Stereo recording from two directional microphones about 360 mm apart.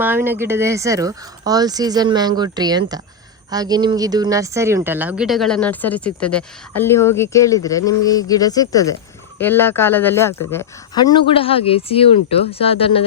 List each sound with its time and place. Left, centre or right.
0.0 s a woman's voice: centre